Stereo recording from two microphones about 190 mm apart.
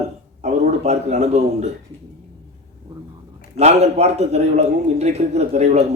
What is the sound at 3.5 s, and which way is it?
A man's voice, 35° right (ahead or behind).